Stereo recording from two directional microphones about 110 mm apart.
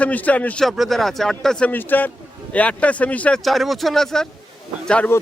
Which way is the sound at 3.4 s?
Centre (ahead or behind).